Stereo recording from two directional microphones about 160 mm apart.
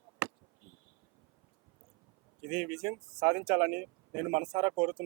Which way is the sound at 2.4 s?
10° right (ahead or behind).